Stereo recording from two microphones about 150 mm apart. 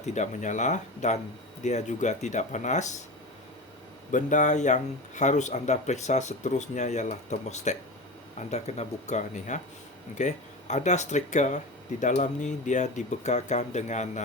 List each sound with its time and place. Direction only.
0.0 s speech: 50° left (ahead or behind)
4.1 s speech: 55° left (ahead or behind)